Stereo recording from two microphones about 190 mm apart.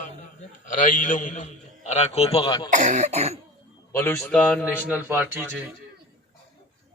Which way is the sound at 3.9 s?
10° left (ahead or behind).